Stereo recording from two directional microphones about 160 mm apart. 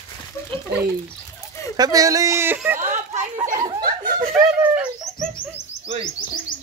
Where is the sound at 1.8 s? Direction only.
20° right (ahead or behind).